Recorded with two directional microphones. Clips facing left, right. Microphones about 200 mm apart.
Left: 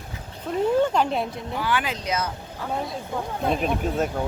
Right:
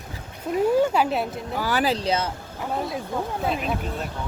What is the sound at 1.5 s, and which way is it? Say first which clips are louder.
Speech: right 3 dB; 40° right (ahead or behind).